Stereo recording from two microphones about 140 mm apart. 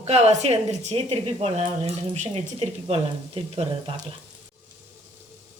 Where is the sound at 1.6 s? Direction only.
55° right (ahead or behind).